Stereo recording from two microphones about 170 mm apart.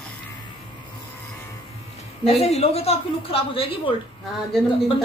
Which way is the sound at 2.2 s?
35° left (ahead or behind).